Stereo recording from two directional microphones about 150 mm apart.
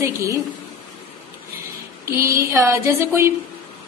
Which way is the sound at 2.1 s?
15° right (ahead or behind).